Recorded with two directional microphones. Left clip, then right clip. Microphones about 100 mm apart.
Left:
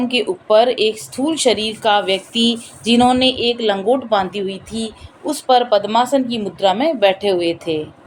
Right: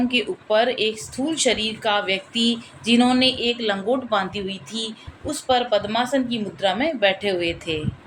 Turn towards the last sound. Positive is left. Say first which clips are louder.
# left 6 dB
turn(degrees=55)  # may be behind; listen again after turning